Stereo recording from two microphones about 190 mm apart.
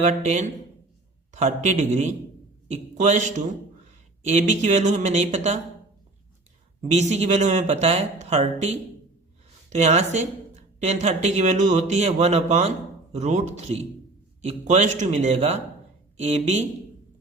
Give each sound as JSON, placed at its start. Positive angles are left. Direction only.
{"t": 0.0, "sound": "a man's voice", "side_deg": -35}
{"t": 6.8, "sound": "speech", "side_deg": -35}
{"t": 9.7, "sound": "speech", "side_deg": -35}